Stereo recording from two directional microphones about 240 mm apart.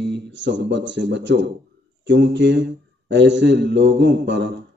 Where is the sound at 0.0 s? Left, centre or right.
Right.